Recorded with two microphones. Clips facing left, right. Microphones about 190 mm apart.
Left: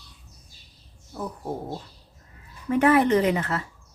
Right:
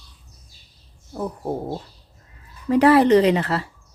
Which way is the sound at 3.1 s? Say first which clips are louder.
Right 6 dB; 75° right (ahead or behind).